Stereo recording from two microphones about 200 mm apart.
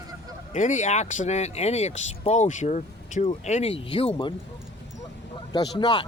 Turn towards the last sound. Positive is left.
turn(degrees=20)  # may be behind; listen again after turning